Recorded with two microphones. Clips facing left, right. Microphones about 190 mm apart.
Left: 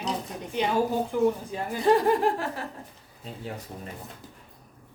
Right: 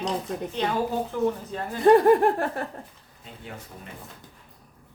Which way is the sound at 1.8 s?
55° right (ahead or behind).